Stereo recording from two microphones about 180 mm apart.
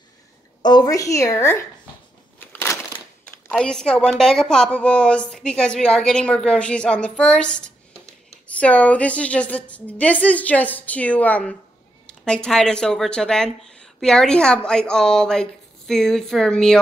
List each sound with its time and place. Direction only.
0.6 s a woman's voice: 25° left (ahead or behind); by 16.7 s 5° left (ahead or behind)